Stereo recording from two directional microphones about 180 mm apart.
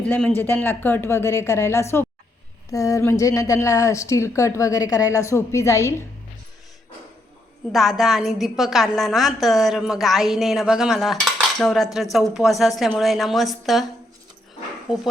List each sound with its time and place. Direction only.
0.0 s a woman's voice: 5° left (ahead or behind)
7.7 s a woman's voice: centre (ahead or behind)